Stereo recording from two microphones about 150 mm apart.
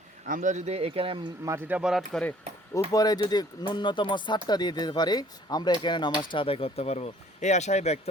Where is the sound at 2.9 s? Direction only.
25° left (ahead or behind).